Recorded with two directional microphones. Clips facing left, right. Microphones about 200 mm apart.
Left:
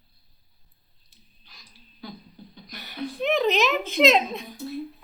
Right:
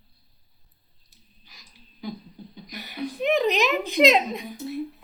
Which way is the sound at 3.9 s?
15° right (ahead or behind).